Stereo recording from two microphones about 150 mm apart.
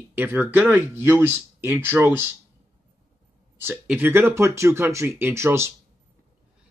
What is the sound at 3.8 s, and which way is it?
Speech, 15° right (ahead or behind).